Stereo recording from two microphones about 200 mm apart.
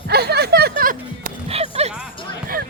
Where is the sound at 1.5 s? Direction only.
30° right (ahead or behind).